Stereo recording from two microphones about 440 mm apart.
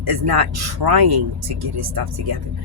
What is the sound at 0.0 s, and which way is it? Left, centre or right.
Speech, right.